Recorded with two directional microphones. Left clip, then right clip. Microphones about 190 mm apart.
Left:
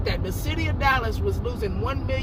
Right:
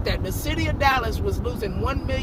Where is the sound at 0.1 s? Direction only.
20° right (ahead or behind).